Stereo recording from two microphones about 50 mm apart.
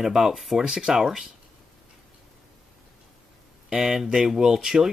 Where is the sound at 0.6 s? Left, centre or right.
Centre.